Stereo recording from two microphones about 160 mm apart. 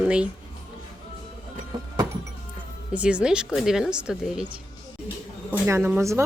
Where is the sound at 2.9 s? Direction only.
5° right (ahead or behind).